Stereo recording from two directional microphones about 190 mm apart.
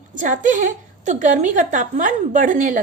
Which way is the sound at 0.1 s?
45° right (ahead or behind).